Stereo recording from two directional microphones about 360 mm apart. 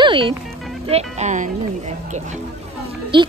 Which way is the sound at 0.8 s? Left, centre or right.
Centre.